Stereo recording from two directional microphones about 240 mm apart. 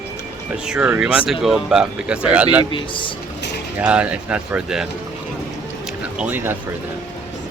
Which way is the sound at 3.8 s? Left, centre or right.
Centre.